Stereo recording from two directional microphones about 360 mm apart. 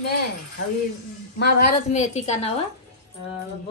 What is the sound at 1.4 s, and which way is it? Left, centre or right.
A woman's voice, left.